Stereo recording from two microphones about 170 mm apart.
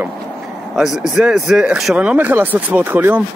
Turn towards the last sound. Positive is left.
turn(degrees=-10)  # may be behind; listen again after turning